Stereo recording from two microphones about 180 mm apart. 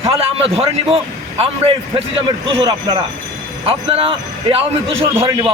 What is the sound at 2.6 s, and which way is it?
A man's voice, 25° right (ahead or behind).